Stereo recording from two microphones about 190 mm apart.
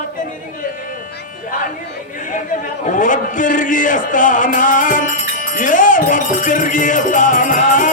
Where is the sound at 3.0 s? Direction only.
45° left (ahead or behind).